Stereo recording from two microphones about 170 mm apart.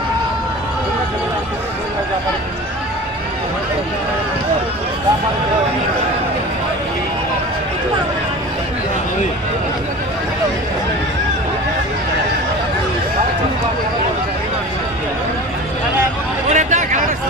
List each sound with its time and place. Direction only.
16.4 s vehicle: 45° right (ahead or behind)